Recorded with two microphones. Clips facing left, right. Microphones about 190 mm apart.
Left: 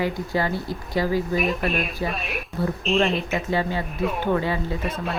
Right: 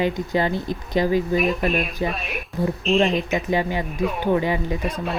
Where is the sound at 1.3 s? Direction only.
Centre (ahead or behind).